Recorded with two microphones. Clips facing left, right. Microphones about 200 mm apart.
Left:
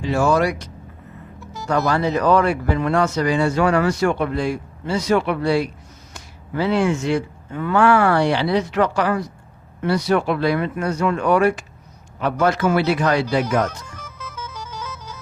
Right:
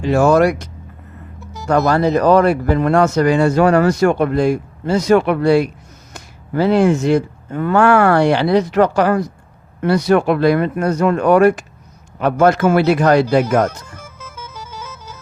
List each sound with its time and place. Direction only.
0.0 s speech: 50° right (ahead or behind)
1.9 s speech: 40° right (ahead or behind)
13.7 s music: 25° right (ahead or behind)